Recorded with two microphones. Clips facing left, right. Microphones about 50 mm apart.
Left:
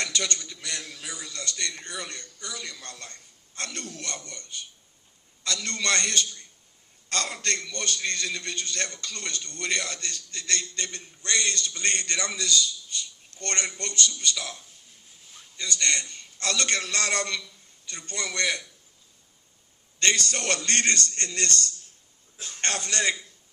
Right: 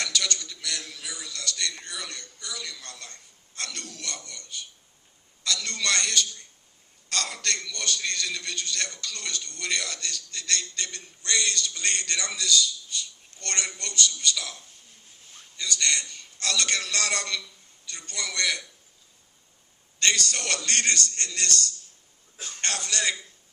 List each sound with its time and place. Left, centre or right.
0.0 s a sound: left
0.3 s a man's voice: left
20.0 s a man's voice: left